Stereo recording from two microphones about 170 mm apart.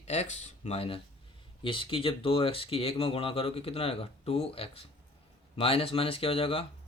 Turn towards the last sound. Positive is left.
turn(degrees=35)  # may be behind; listen again after turning